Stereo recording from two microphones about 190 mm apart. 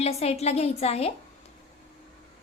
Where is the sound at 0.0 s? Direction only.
35° left (ahead or behind).